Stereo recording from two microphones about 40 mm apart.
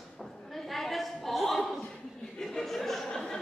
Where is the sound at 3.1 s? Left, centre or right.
Centre.